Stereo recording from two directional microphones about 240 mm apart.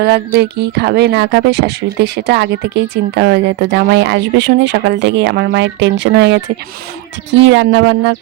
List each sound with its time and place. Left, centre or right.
0.0 s speech: right